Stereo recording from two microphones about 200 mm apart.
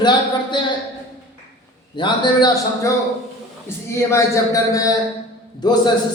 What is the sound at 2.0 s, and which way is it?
A man's voice, 20° left (ahead or behind).